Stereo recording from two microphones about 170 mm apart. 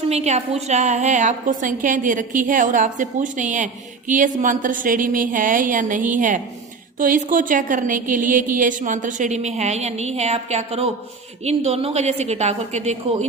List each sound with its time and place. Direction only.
0.1 s a woman's voice: 40° right (ahead or behind)